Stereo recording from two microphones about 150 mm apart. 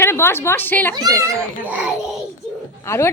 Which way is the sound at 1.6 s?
10° right (ahead or behind).